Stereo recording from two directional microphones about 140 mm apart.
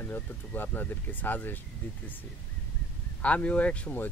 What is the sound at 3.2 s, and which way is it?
Speech, 10° left (ahead or behind).